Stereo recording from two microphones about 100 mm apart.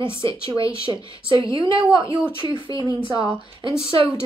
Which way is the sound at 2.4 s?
55° right (ahead or behind).